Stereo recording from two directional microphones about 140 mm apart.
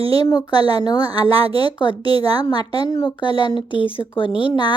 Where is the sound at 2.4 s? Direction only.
30° left (ahead or behind).